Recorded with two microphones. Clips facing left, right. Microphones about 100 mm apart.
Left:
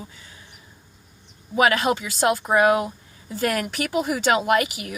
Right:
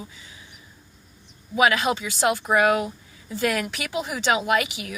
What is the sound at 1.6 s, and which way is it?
A woman's voice, 45° left (ahead or behind).